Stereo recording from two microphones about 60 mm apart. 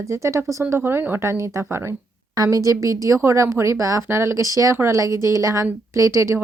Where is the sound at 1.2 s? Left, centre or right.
Right.